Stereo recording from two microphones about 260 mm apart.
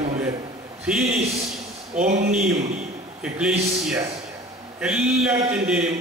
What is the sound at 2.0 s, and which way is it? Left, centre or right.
Speech, right.